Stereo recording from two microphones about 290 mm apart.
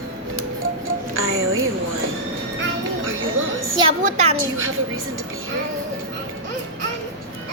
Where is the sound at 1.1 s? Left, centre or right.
Right.